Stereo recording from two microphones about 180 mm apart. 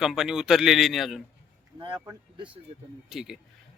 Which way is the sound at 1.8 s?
25° right (ahead or behind).